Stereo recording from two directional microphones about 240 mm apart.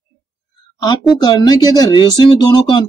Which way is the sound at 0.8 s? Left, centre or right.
Centre.